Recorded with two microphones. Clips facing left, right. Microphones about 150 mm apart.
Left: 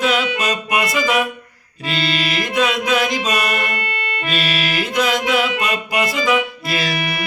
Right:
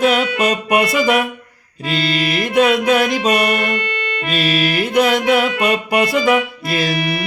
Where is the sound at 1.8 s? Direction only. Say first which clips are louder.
Right 3 dB; 45° right (ahead or behind); by 3.5 s 60° right (ahead or behind).